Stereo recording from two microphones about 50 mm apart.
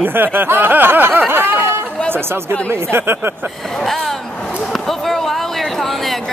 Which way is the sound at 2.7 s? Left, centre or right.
Right.